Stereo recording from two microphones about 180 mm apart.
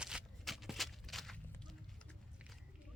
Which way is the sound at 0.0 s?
5° right (ahead or behind).